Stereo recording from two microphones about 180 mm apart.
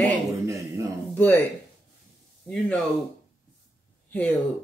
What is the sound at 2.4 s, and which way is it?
Speech, centre (ahead or behind).